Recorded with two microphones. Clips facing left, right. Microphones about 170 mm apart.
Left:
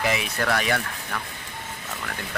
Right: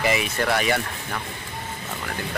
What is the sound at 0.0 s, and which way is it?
Speech, centre (ahead or behind).